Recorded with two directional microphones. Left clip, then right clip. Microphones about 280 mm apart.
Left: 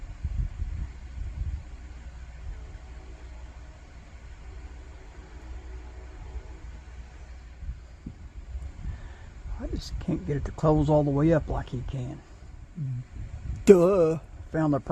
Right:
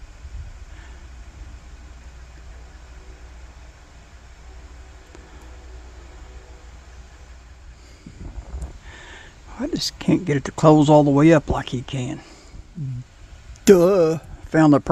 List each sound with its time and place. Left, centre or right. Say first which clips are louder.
9.6 s speech: right 13 dB; right
13.7 s speech: right 4 dB; centre
14.6 s speech: right 11 dB; right